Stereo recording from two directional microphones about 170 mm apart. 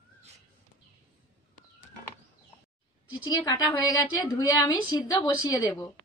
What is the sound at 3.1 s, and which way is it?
A woman's voice, 25° left (ahead or behind).